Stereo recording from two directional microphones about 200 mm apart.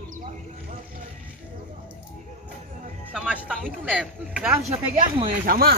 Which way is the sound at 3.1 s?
5° right (ahead or behind).